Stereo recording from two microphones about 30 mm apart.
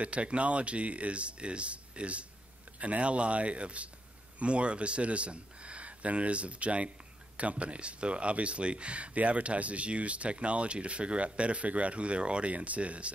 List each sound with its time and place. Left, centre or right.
0.0 s speech: right